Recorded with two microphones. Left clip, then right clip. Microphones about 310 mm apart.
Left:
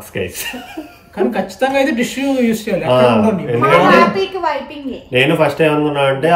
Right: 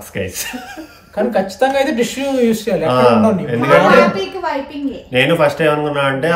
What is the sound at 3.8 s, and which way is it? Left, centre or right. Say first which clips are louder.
Speech: even; left.